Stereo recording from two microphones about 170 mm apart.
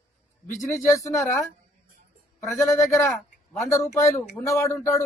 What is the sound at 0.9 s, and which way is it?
Speech, 20° left (ahead or behind).